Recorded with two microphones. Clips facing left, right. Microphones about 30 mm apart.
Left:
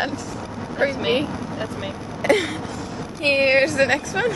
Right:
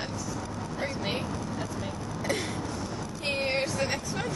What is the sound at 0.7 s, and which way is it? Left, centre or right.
Speech, left.